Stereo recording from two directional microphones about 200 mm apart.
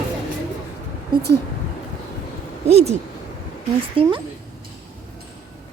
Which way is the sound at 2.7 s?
30° right (ahead or behind).